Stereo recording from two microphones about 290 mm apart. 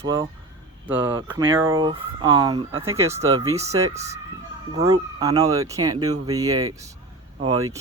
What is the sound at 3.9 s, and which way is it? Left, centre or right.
Speech, right.